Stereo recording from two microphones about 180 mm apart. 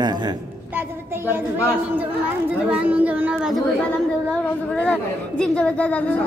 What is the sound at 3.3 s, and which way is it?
Chatter, centre (ahead or behind).